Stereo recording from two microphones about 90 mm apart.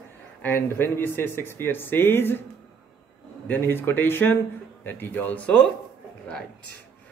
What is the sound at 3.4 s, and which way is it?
Speech, 20° left (ahead or behind).